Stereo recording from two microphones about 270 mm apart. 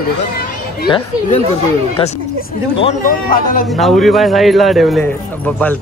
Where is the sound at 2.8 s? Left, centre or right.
Left.